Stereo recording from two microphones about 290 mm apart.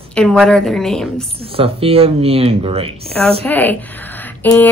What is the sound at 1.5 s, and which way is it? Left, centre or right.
Speech, centre.